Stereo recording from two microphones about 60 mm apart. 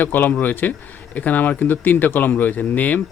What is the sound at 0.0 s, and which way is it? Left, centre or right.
A man's voice, left.